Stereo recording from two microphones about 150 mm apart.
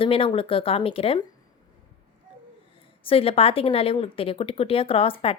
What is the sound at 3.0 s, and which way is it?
A woman's voice, 40° left (ahead or behind).